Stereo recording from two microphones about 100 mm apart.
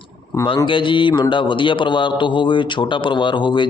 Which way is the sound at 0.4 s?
55° left (ahead or behind).